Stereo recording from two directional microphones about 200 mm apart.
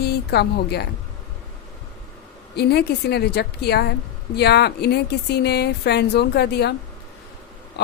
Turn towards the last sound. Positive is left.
turn(degrees=55)  # may be behind; listen again after turning